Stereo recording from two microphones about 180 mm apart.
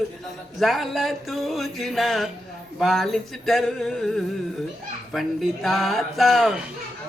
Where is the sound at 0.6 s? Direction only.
Centre (ahead or behind).